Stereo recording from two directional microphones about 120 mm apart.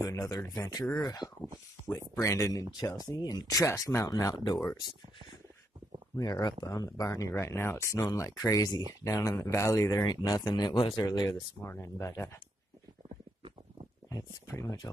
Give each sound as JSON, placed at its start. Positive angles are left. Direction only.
{"t": 0.0, "sound": "speech", "side_deg": 30}
{"t": 6.1, "sound": "speech", "side_deg": 30}
{"t": 11.6, "sound": "speech", "side_deg": 20}
{"t": 14.1, "sound": "speech", "side_deg": 30}